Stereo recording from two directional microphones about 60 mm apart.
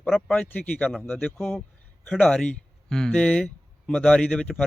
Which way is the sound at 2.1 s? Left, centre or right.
Centre.